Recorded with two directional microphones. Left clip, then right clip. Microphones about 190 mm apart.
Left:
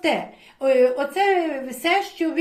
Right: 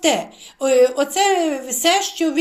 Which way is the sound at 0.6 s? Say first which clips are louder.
Right 3 dB; 40° right (ahead or behind).